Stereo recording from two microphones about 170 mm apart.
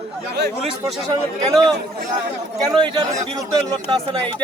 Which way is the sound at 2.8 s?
25° right (ahead or behind).